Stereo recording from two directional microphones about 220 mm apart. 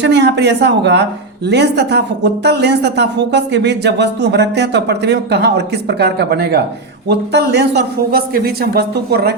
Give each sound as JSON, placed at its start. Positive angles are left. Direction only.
{"t": 0.0, "sound": "a woman's voice", "side_deg": -50}